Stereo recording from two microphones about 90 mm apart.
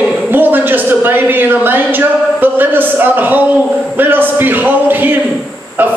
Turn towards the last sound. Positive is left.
turn(degrees=-20)  # may be behind; listen again after turning